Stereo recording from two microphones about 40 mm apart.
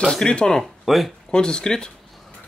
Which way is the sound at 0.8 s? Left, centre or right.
Centre.